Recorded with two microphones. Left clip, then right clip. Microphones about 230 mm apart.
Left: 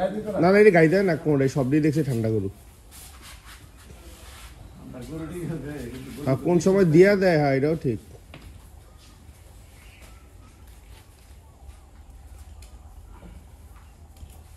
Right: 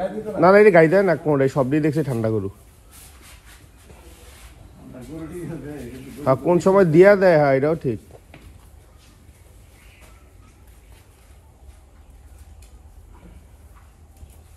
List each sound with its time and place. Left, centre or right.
0.0 s speech: centre
6.2 s speech: centre